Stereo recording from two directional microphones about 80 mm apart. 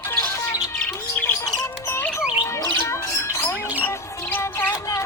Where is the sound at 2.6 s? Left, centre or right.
Left.